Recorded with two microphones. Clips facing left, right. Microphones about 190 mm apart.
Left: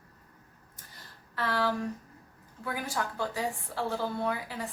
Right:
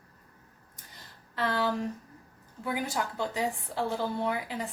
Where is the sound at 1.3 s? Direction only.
20° right (ahead or behind).